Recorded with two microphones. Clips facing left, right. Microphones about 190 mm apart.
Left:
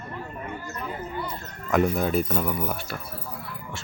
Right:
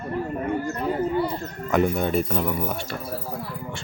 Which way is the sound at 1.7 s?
Centre (ahead or behind).